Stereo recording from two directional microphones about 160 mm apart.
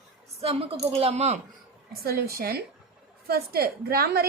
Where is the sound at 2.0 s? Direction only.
70° right (ahead or behind).